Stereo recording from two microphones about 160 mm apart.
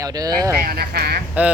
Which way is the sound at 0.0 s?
20° right (ahead or behind).